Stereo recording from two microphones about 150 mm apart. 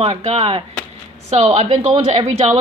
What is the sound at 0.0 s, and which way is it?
A woman's voice, 45° right (ahead or behind).